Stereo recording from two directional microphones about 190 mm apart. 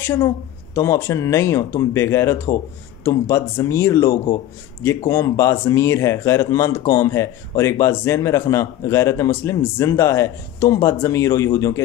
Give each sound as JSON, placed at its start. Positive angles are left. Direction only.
{"t": 0.0, "sound": "a man's voice", "side_deg": 15}